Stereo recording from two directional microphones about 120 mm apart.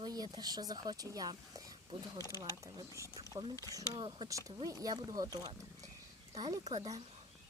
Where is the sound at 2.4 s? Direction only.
30° right (ahead or behind).